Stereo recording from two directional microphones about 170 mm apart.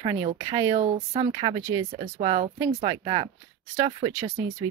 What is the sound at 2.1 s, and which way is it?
Speech, 35° right (ahead or behind).